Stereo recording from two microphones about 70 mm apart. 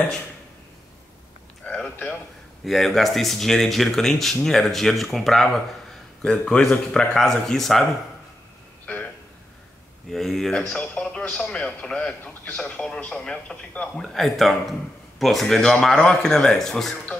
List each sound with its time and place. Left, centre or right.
1.6 s a sound: left
2.6 s speech: centre
6.2 s a man's voice: centre
8.8 s a sound: centre
10.1 s a man's voice: centre
14.0 s speech: centre